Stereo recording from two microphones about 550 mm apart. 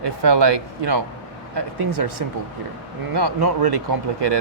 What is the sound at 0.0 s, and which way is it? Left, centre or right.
Speech, right.